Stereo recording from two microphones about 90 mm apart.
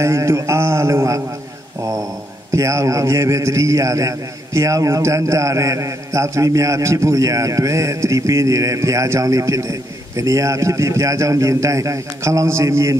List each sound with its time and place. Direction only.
0.0 s a man's voice: 30° right (ahead or behind)
2.5 s a man's voice: 35° right (ahead or behind)